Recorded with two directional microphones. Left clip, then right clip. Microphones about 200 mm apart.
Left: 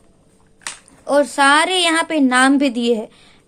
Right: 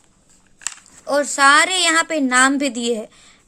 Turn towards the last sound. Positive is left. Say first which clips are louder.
# left 4 dB
turn(degrees=-10)  # may be behind; listen again after turning